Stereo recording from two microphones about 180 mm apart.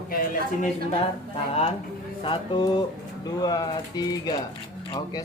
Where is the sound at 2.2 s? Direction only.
25° left (ahead or behind).